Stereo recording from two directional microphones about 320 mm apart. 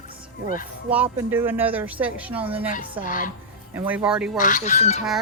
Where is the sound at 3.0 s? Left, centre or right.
Left.